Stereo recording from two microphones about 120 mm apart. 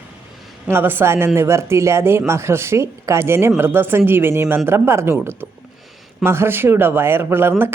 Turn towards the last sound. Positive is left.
turn(degrees=-20)  # may be behind; listen again after turning